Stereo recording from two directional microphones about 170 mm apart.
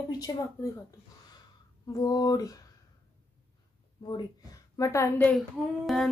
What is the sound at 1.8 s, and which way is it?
Speech, 20° left (ahead or behind).